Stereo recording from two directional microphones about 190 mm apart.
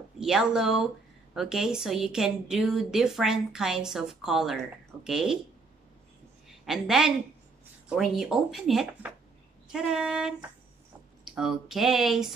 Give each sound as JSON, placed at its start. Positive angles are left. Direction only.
{"t": 0.2, "sound": "a woman's voice", "side_deg": -5}
{"t": 6.6, "sound": "a woman's voice", "side_deg": 0}